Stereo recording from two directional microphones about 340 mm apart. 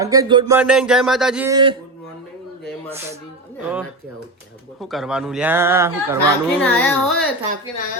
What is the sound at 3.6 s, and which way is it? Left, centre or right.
Speech, centre.